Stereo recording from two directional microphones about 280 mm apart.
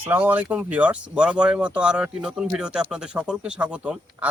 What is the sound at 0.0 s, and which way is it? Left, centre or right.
Speech, centre.